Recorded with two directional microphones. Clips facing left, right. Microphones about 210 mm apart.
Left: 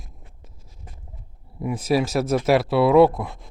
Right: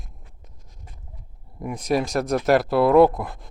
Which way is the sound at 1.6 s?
Centre (ahead or behind).